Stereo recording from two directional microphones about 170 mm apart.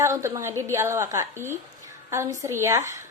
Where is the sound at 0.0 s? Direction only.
15° right (ahead or behind).